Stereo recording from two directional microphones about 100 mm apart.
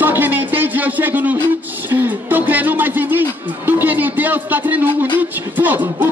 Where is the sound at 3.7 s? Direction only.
20° right (ahead or behind).